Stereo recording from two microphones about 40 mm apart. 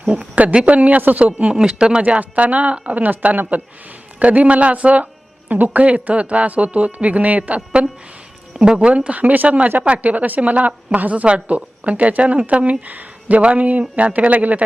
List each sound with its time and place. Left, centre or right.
0.0 s speech: right
0.6 s speech: right
1.5 s speech: right
2.0 s speech: right
4.2 s a woman's voice: right
5.8 s speech: right
8.5 s speech: right
8.9 s speech: right